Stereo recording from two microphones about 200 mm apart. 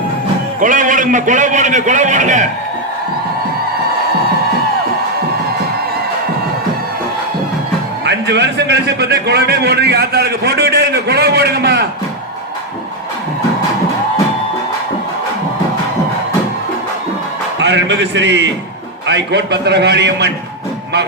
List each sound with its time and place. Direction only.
0.6 s a man's voice: 40° right (ahead or behind)
8.0 s a man's voice: 60° right (ahead or behind)
17.6 s a man's voice: 60° right (ahead or behind)